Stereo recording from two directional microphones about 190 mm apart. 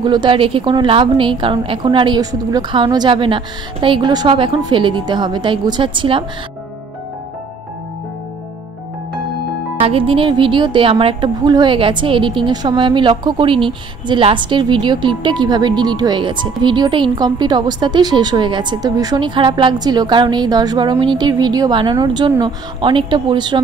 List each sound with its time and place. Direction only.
0.0 s a woman's voice: 25° right (ahead or behind)
9.8 s a woman's voice: 30° right (ahead or behind)